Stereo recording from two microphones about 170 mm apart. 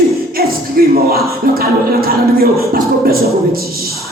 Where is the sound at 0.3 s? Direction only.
60° right (ahead or behind).